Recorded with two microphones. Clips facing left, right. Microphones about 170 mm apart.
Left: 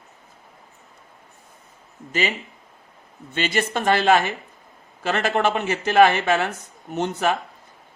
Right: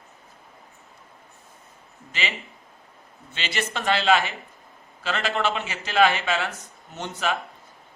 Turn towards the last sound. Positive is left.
turn(degrees=55)  # may be behind; listen again after turning